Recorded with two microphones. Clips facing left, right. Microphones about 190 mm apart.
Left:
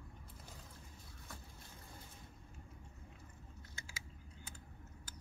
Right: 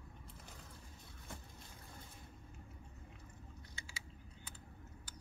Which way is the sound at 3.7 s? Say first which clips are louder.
Left 1 dB; 45° left (ahead or behind).